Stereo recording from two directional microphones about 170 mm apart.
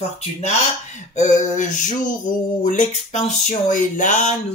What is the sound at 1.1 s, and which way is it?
Speech, 45° left (ahead or behind).